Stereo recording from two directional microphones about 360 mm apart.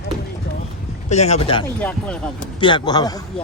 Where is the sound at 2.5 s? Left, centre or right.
Centre.